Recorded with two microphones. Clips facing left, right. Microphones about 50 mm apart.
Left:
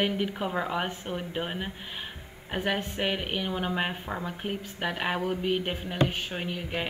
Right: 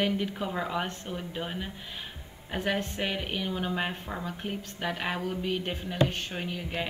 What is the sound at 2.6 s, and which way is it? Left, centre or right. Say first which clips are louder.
Speech: left 1 dB; centre.